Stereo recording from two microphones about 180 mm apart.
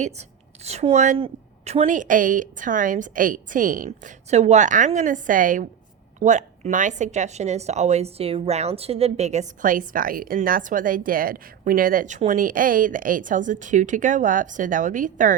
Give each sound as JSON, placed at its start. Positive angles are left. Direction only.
{"t": 0.0, "sound": "a woman's voice", "side_deg": -35}